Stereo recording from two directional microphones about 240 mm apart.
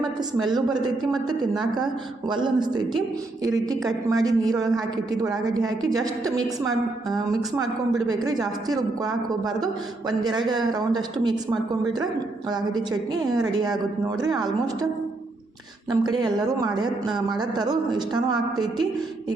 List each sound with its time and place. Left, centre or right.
2.3 s a woman's voice: centre
7.5 s a woman's voice: centre
12.5 s a woman's voice: centre
15.9 s a woman's voice: centre